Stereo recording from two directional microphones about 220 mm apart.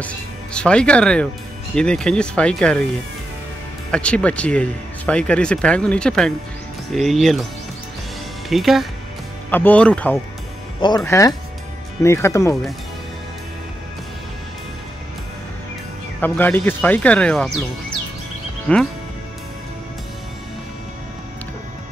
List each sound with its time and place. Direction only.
0.0 s speech: 5° left (ahead or behind)
8.5 s speech: centre (ahead or behind)
10.8 s speech: 20° left (ahead or behind)
16.2 s speech: 10° left (ahead or behind)
18.7 s speech: 5° left (ahead or behind)